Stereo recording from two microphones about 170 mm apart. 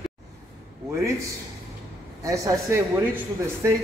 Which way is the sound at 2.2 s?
20° right (ahead or behind).